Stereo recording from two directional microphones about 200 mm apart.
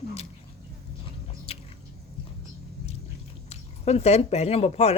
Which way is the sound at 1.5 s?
30° left (ahead or behind).